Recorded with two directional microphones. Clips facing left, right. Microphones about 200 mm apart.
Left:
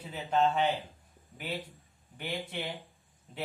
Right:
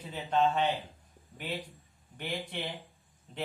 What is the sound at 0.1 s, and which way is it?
Speech, 5° left (ahead or behind).